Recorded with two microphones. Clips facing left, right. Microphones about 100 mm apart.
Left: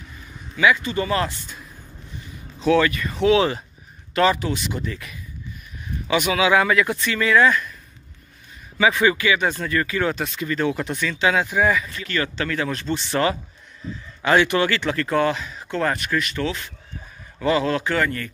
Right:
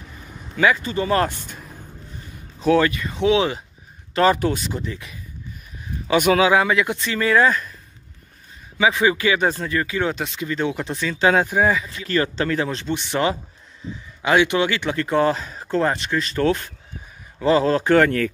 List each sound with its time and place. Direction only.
0.6 s speech: 40° right (ahead or behind)
2.6 s speech: 40° right (ahead or behind)
2.9 s speech: 20° right (ahead or behind)
4.3 s speech: 50° right (ahead or behind)
4.7 s speech: 25° right (ahead or behind)
6.0 s speech: 45° right (ahead or behind)
6.5 s speech: 25° right (ahead or behind)
9.0 s speech: 30° right (ahead or behind)
9.7 s speech: 15° right (ahead or behind)
10.9 s speech: 30° right (ahead or behind)
11.1 s speech: 45° right (ahead or behind)
11.6 s speech: 25° right (ahead or behind)
16.4 s speech: 50° right (ahead or behind)
17.4 s speech: 35° right (ahead or behind)